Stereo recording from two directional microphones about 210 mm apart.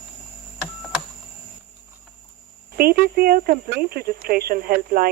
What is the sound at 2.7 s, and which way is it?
Speech, 45° right (ahead or behind).